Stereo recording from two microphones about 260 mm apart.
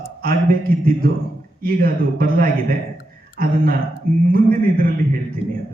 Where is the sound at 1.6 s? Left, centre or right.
Right.